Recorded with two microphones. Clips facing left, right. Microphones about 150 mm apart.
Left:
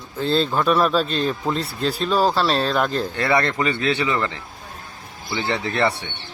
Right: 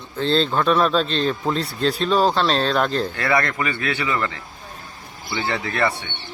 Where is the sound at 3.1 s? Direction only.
25° left (ahead or behind).